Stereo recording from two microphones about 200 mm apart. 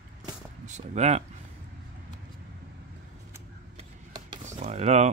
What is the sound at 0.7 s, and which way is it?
Speech, 35° right (ahead or behind).